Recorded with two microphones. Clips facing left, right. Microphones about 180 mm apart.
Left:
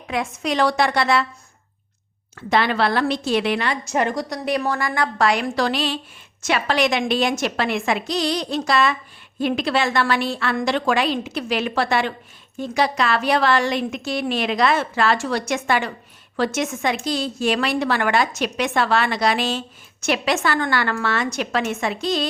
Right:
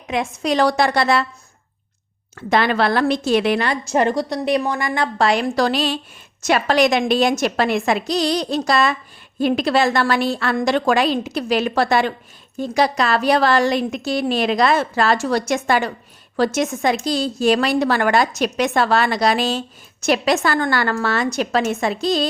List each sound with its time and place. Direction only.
0.1 s a woman's voice: 20° right (ahead or behind)
0.4 s a woman's voice: 40° right (ahead or behind)
2.3 s a woman's voice: 45° right (ahead or behind)